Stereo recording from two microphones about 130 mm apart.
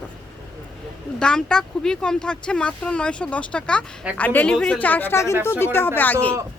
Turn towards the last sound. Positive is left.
turn(degrees=15)  # may be behind; listen again after turning